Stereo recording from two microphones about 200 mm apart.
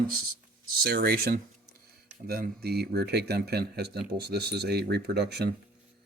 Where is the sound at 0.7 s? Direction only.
50° right (ahead or behind).